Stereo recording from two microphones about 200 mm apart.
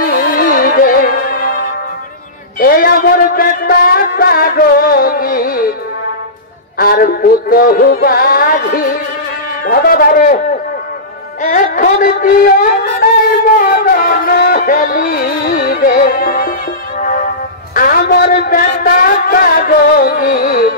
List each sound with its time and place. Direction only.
0.0 s music: 45° left (ahead or behind)
2.6 s music: 45° left (ahead or behind)
6.8 s speech: 50° left (ahead or behind)
11.4 s speech: 40° left (ahead or behind)
13.6 s music: 45° left (ahead or behind)
17.7 s speech: 45° left (ahead or behind)